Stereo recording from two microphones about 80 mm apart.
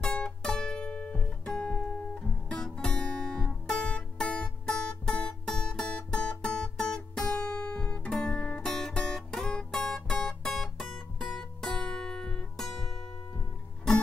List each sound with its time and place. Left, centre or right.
0.0 s music: centre